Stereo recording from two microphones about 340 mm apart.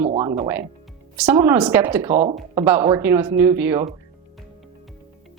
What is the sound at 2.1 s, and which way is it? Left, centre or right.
Speech, centre.